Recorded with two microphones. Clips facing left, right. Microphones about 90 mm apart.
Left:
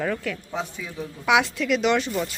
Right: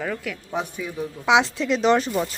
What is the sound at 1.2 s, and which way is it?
Speech, 25° right (ahead or behind).